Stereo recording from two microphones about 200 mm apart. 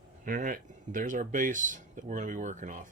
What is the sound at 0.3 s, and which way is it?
Speech, 45° right (ahead or behind).